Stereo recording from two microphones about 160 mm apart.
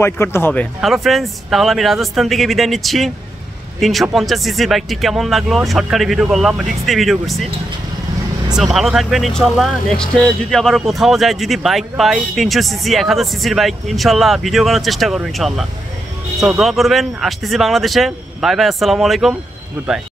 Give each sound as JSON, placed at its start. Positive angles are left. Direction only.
{"t": 0.0, "sound": "speech", "side_deg": 15}
{"t": 0.7, "sound": "speech", "side_deg": 0}
{"t": 8.7, "sound": "speech", "side_deg": 0}